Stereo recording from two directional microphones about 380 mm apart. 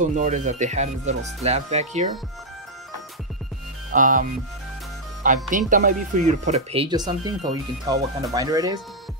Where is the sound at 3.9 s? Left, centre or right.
Right.